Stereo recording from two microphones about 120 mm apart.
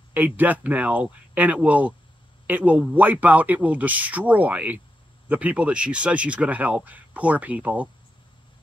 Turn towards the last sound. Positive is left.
turn(degrees=-10)  # may be behind; listen again after turning